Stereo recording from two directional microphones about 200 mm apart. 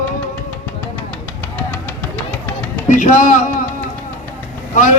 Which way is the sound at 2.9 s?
40° left (ahead or behind).